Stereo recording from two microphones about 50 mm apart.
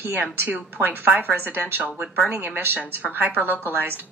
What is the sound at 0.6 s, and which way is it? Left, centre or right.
Speech, right.